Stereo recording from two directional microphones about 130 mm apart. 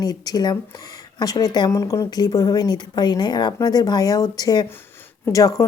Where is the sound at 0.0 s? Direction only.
30° left (ahead or behind).